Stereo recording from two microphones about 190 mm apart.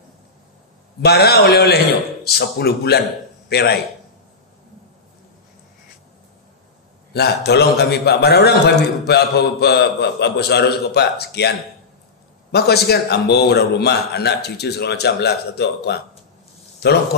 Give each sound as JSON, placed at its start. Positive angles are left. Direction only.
{"t": 1.0, "sound": "a man's voice", "side_deg": 55}
{"t": 7.1, "sound": "a man's voice", "side_deg": 60}